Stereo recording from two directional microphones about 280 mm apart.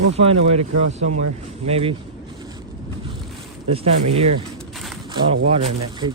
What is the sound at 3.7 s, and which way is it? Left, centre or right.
Speech, right.